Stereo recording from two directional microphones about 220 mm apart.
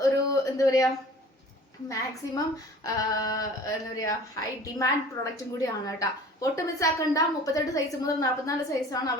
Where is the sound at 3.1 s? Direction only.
15° left (ahead or behind).